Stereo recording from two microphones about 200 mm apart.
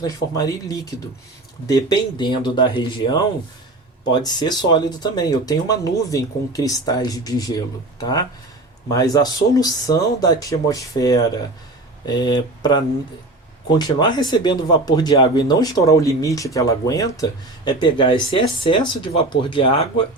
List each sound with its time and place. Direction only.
0.0 s speech: 20° left (ahead or behind)